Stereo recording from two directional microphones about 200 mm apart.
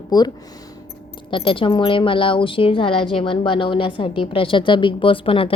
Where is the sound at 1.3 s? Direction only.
25° left (ahead or behind).